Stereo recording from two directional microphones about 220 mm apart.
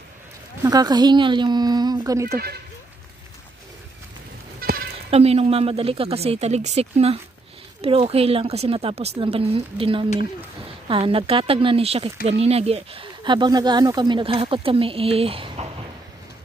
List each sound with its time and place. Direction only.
0.7 s speech: 20° right (ahead or behind)
2.2 s speech: 45° right (ahead or behind)
4.6 s goat: 45° right (ahead or behind)
5.1 s speech: 30° right (ahead or behind)